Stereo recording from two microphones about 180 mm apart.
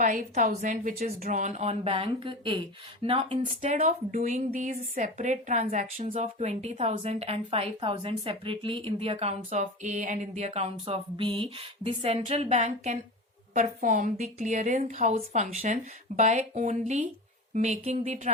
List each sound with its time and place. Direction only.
0.0 s a woman's voice: 45° right (ahead or behind)